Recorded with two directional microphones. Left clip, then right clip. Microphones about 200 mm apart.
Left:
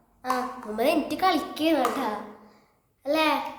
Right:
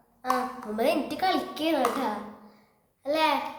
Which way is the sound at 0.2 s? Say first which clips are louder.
Even; 10° left (ahead or behind).